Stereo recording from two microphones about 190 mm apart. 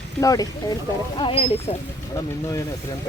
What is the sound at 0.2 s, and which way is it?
Speech, 20° left (ahead or behind).